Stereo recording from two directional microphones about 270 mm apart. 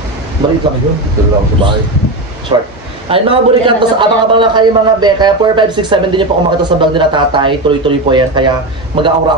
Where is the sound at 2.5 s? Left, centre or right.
Centre.